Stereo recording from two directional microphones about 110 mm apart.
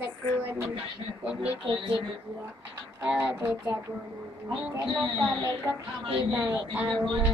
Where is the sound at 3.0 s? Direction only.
10° right (ahead or behind).